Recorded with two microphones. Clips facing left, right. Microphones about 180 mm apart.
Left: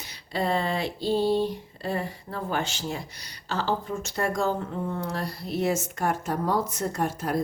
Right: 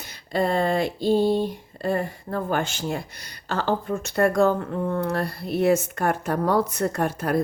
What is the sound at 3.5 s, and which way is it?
Speech, 55° right (ahead or behind).